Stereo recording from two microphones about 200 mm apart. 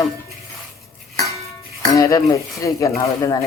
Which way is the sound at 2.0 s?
15° left (ahead or behind).